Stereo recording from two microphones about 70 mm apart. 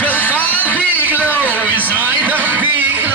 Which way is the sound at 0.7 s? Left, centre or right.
Right.